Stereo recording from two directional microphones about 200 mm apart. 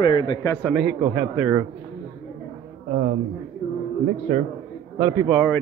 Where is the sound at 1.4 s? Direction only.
10° right (ahead or behind).